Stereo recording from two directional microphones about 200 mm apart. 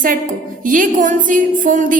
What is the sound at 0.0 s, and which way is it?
A woman's voice, 40° right (ahead or behind).